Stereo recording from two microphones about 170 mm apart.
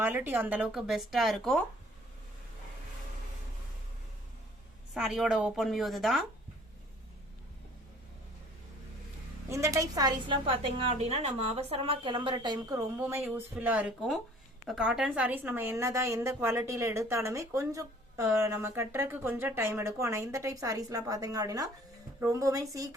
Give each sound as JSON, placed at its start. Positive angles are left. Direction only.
{"t": 0.0, "sound": "speech", "side_deg": -10}
{"t": 4.9, "sound": "speech", "side_deg": -5}
{"t": 9.5, "sound": "a woman's voice", "side_deg": -20}